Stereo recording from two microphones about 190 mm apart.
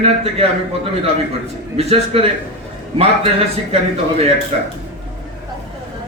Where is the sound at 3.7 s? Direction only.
30° right (ahead or behind).